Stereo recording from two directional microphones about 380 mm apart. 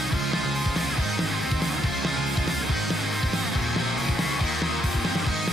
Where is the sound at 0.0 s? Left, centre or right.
Centre.